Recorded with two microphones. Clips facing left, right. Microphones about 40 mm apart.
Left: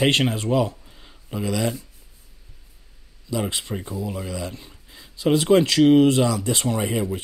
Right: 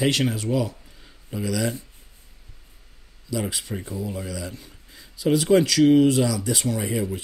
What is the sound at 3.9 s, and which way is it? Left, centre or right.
Speech, left.